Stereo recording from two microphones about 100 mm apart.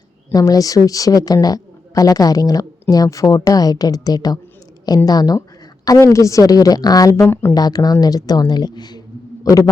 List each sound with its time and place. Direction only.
0.3 s a woman's voice: 35° left (ahead or behind)